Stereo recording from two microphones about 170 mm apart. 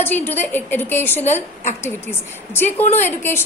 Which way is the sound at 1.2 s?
45° left (ahead or behind).